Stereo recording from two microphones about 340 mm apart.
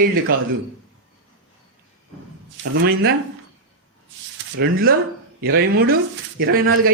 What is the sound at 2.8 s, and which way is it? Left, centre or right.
Speech, right.